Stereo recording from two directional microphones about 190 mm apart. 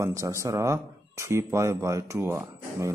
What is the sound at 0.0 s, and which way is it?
Speech, 15° right (ahead or behind).